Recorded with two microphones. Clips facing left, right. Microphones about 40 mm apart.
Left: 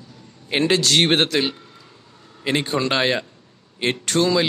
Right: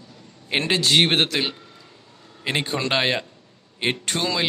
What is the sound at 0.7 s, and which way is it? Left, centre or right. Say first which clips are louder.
A man's voice: even; centre.